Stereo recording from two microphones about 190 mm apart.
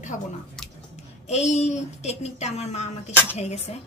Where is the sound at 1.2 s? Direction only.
35° left (ahead or behind).